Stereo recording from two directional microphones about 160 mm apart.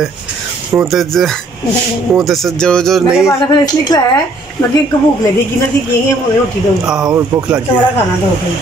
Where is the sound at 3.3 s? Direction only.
25° left (ahead or behind).